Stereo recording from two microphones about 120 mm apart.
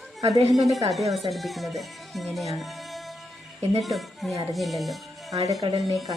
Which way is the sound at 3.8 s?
Centre (ahead or behind).